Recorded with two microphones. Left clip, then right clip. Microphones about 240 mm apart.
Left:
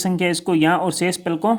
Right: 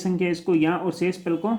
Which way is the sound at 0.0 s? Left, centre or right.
Left.